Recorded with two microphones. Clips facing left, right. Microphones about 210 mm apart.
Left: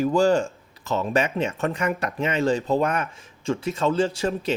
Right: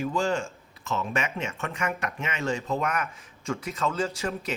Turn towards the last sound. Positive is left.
turn(degrees=30)  # may be behind; listen again after turning